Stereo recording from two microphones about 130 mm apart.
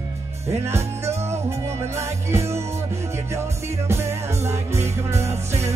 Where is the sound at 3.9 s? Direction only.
20° right (ahead or behind).